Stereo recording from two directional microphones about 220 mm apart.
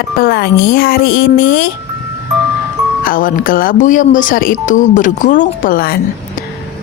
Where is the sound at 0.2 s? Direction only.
45° left (ahead or behind).